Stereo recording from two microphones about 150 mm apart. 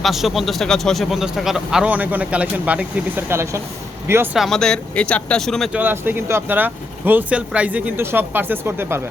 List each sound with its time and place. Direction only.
0.0 s speech: centre (ahead or behind); by 3.6 s 20° right (ahead or behind)
4.4 s speech: centre (ahead or behind)
5.7 s speech: 15° right (ahead or behind)